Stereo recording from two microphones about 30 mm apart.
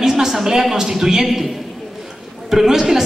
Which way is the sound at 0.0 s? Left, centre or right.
Centre.